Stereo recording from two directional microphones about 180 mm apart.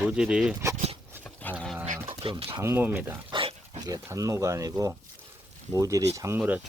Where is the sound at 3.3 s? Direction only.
30° right (ahead or behind).